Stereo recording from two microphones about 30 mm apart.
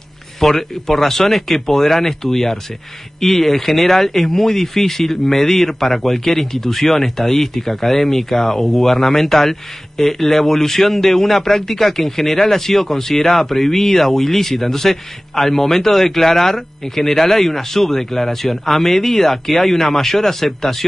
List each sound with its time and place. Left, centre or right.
0.4 s speech: centre